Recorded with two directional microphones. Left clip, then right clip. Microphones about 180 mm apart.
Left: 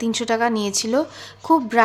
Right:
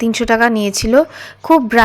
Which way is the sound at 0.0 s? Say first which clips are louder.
Right 7 dB; 30° right (ahead or behind).